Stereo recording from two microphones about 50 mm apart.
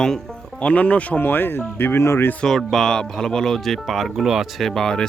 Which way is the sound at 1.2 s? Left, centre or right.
Left.